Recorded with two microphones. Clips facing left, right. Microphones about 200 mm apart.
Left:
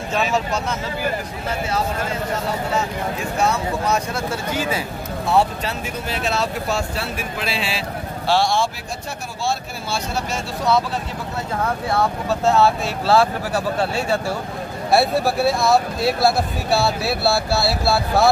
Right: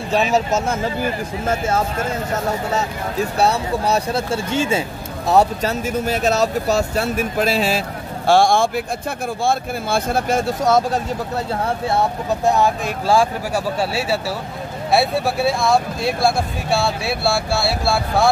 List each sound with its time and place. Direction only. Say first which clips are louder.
0.1 s speech: right 4 dB; 40° right (ahead or behind)
2.7 s speech: right 1 dB; 35° right (ahead or behind)
5.2 s speech: right 3 dB; 40° right (ahead or behind)
11.6 s speech: even; 25° right (ahead or behind); by 18.3 s centre (ahead or behind)